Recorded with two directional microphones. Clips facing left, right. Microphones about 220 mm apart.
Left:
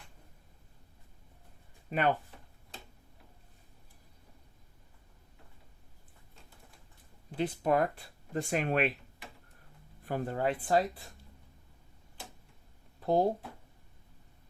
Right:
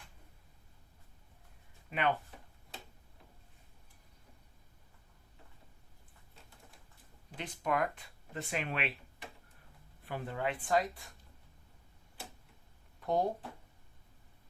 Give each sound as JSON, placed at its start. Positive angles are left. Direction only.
{"t": 1.9, "sound": "speech", "side_deg": 40}
{"t": 7.5, "sound": "speech", "side_deg": 30}
{"t": 10.1, "sound": "speech", "side_deg": 45}
{"t": 13.0, "sound": "a sound", "side_deg": 30}